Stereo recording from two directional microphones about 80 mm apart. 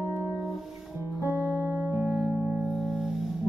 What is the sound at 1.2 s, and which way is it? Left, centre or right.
Music, right.